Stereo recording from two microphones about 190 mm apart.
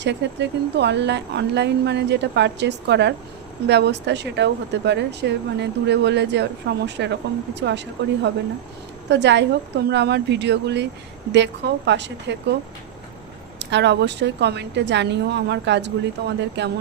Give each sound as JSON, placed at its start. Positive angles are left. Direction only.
{"t": 0.0, "sound": "speech", "side_deg": -65}
{"t": 11.9, "sound": "speech", "side_deg": -65}
{"t": 13.6, "sound": "speech", "side_deg": -65}